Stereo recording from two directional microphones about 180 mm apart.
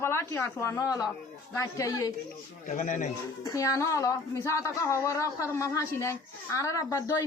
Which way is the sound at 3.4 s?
20° left (ahead or behind).